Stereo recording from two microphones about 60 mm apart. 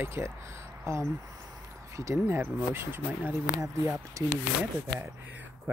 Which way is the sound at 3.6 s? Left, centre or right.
Right.